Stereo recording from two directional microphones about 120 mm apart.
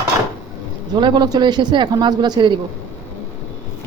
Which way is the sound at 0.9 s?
40° right (ahead or behind).